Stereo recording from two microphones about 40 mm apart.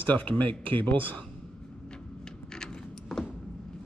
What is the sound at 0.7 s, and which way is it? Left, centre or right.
Speech, left.